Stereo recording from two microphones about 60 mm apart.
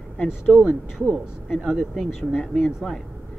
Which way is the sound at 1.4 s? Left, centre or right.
Centre.